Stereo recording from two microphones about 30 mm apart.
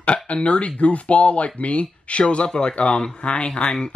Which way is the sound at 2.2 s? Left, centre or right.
Left.